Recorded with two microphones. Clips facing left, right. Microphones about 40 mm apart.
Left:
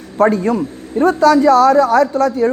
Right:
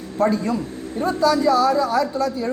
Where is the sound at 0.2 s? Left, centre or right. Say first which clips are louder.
Left 7 dB; left.